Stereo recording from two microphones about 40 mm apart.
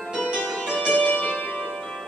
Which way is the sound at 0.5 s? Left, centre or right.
Left.